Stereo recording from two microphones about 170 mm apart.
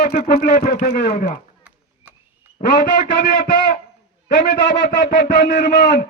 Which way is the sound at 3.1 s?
80° left.